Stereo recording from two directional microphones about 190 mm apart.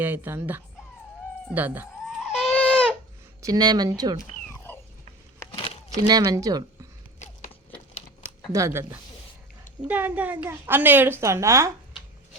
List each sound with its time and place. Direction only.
0.0 s a woman's voice: 10° right (ahead or behind)
1.5 s goat: 10° right (ahead or behind); by 2.9 s 5° left (ahead or behind)
3.4 s speech: 20° right (ahead or behind)
4.4 s cat: 10° left (ahead or behind)
5.5 s a sound: 30° left (ahead or behind)
6.1 s speech: 20° right (ahead or behind)
8.5 s a woman's voice: 15° right (ahead or behind)